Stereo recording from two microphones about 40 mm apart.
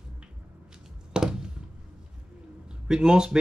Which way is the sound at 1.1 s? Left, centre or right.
Centre.